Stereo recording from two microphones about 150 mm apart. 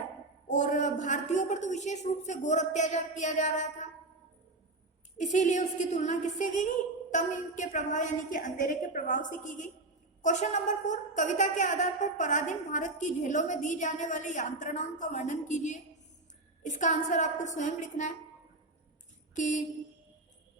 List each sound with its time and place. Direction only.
0.4 s a woman's voice: 55° left (ahead or behind)
5.1 s a woman's voice: 55° left (ahead or behind)
19.3 s a sound: 55° left (ahead or behind)